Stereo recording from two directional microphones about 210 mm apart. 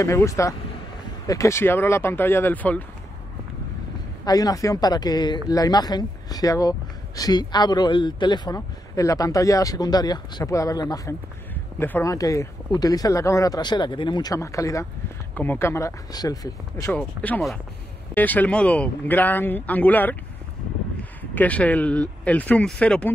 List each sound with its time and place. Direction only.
0.0 s speech: 15° left (ahead or behind)
4.2 s speech: 15° left (ahead or behind)
17.2 s speech: 5° left (ahead or behind)